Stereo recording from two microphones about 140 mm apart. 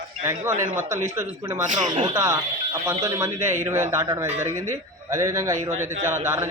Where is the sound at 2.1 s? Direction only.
20° right (ahead or behind).